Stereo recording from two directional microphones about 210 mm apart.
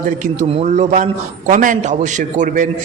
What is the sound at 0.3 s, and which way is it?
A man's voice, 30° right (ahead or behind).